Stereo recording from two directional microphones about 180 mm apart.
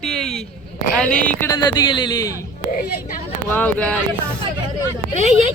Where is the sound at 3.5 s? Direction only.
10° left (ahead or behind).